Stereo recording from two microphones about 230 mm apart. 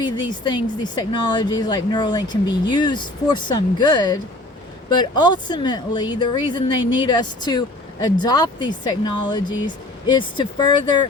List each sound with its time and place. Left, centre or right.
0.0 s speech: centre